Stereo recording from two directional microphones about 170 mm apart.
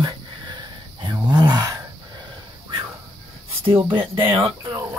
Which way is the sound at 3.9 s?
30° right (ahead or behind).